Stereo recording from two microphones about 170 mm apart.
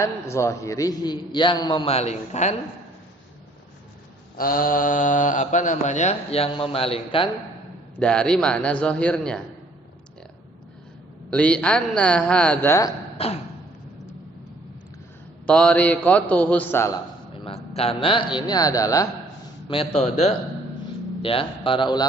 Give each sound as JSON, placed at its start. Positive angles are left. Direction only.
{"t": 0.0, "sound": "a man's voice", "side_deg": 15}
{"t": 4.4, "sound": "speech", "side_deg": 55}
{"t": 7.9, "sound": "a man's voice", "side_deg": 5}
{"t": 11.3, "sound": "a man's voice", "side_deg": 5}
{"t": 13.1, "sound": "a sound", "side_deg": 35}
{"t": 15.4, "sound": "a man's voice", "side_deg": 5}
{"t": 17.4, "sound": "a man's voice", "side_deg": 35}
{"t": 19.6, "sound": "a man's voice", "side_deg": 30}